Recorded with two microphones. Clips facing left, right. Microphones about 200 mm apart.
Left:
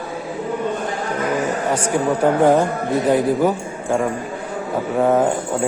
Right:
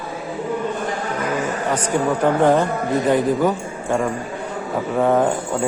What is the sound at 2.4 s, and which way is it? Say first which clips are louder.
A man's voice: left 1 dB; 10° left (ahead or behind).